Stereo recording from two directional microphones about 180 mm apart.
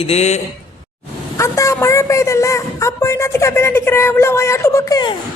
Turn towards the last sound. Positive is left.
turn(degrees=20)  # may be behind; listen again after turning